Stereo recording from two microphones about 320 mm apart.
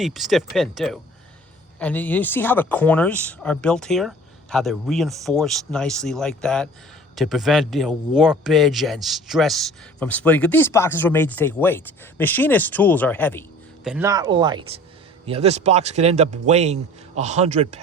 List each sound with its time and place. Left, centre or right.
0.0 s speech: centre
13.8 s speech: centre